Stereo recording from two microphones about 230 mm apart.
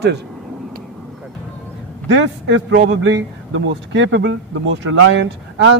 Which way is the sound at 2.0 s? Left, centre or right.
Right.